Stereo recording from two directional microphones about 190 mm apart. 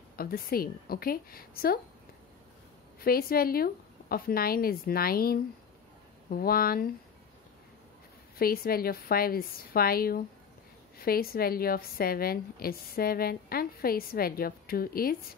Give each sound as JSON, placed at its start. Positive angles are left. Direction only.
{"t": 0.1, "sound": "a woman's voice", "side_deg": 50}
{"t": 3.0, "sound": "a woman's voice", "side_deg": 50}
{"t": 8.4, "sound": "a woman's voice", "side_deg": 50}